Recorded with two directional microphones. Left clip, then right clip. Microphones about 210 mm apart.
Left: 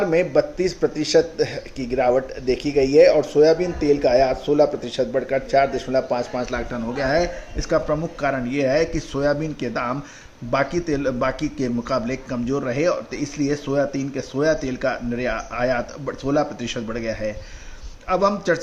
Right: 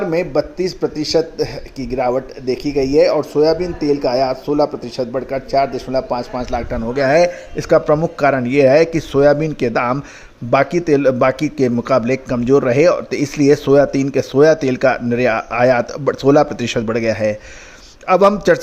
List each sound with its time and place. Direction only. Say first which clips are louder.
0.1 s a man's voice: right 1 dB; 25° right (ahead or behind)